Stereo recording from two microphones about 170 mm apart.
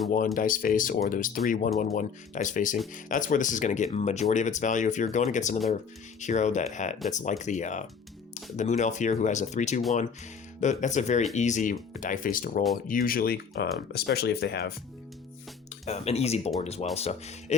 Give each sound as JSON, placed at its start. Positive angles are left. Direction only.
{"t": 0.3, "sound": "speech", "side_deg": 55}
{"t": 15.9, "sound": "speech", "side_deg": 40}